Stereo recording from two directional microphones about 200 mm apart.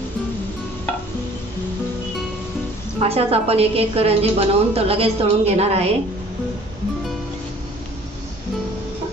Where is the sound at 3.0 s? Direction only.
30° right (ahead or behind).